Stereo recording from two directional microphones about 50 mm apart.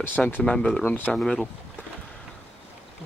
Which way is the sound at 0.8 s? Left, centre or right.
Left.